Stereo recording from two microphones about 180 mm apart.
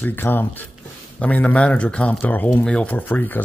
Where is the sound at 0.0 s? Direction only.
10° left (ahead or behind).